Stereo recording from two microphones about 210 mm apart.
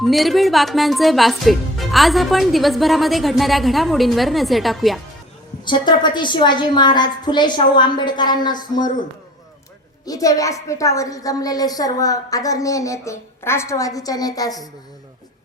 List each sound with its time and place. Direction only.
0.0 s speech: centre (ahead or behind)
5.6 s a woman's voice: 20° left (ahead or behind)
10.1 s a woman's voice: 15° left (ahead or behind)